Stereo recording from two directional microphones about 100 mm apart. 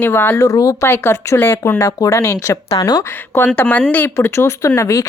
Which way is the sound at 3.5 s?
15° left (ahead or behind).